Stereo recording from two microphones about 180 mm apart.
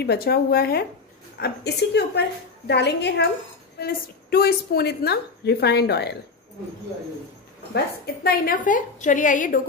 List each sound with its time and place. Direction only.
0.0 s a woman's voice: 60° left (ahead or behind)
3.8 s a woman's voice: 55° left (ahead or behind)
7.7 s a woman's voice: 55° left (ahead or behind)